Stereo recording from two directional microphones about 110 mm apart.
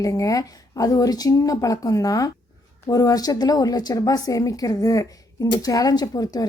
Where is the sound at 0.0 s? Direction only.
30° left (ahead or behind).